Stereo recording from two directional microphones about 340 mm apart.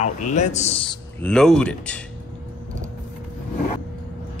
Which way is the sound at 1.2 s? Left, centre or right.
Centre.